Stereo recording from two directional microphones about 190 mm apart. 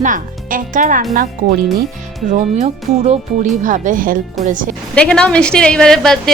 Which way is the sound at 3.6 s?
40° right (ahead or behind).